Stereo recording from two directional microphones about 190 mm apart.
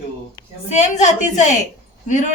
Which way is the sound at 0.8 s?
40° left (ahead or behind).